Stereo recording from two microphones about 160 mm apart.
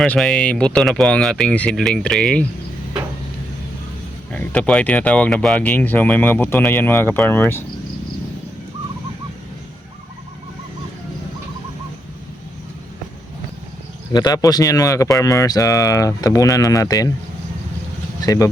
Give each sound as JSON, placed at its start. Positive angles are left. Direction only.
{"t": 0.0, "sound": "speech", "side_deg": 5}
{"t": 4.3, "sound": "speech", "side_deg": 10}
{"t": 14.1, "sound": "speech", "side_deg": 25}
{"t": 18.2, "sound": "speech", "side_deg": 20}